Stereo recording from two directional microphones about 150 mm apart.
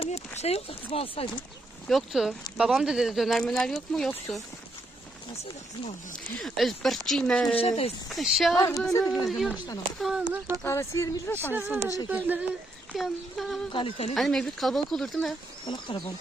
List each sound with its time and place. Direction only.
0.0 s speech: 45° left (ahead or behind)
1.9 s speech: centre (ahead or behind)
6.1 s speech: centre (ahead or behind)
7.6 s speech: 40° left (ahead or behind)
8.1 s speech: centre (ahead or behind)
8.5 s a sound: 20° left (ahead or behind)
9.2 s speech: centre (ahead or behind)
10.6 s speech: 15° left (ahead or behind)
11.5 s speech: 10° right (ahead or behind)
13.0 s speech: centre (ahead or behind)
13.7 s speech: 40° left (ahead or behind)
14.1 s speech: centre (ahead or behind)
15.6 s speech: 30° left (ahead or behind)